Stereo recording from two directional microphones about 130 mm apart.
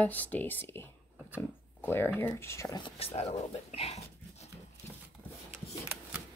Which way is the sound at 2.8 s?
50° left (ahead or behind).